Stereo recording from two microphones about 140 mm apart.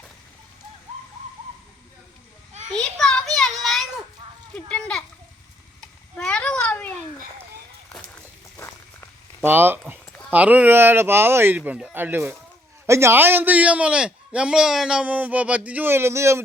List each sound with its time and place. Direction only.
2.7 s child singing: 5° left (ahead or behind)
4.7 s children playing: 5° left (ahead or behind)
6.1 s a sound: 5° left (ahead or behind)
8.5 s walk: 20° left (ahead or behind)
9.4 s a man's voice: 15° right (ahead or behind)